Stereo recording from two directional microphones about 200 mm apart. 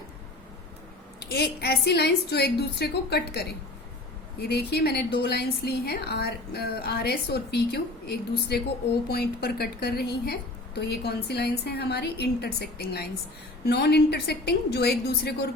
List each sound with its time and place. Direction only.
1.3 s a woman's voice: 55° left (ahead or behind)